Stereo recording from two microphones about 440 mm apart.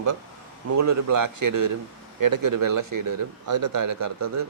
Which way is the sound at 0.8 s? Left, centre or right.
Right.